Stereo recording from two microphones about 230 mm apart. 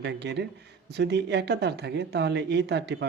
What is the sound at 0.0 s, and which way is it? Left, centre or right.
Speech, right.